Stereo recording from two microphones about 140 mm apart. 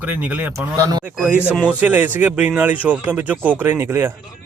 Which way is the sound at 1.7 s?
10° right (ahead or behind).